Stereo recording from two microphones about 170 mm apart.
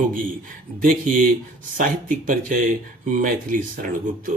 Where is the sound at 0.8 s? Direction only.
50° right (ahead or behind).